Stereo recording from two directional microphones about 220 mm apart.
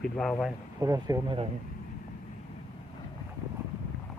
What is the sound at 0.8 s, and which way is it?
Speech, 15° right (ahead or behind).